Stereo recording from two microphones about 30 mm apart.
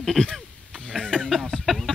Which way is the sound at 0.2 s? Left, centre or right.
Left.